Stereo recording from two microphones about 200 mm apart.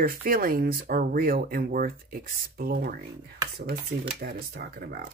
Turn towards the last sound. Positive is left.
turn(degrees=-50)  # may be behind; listen again after turning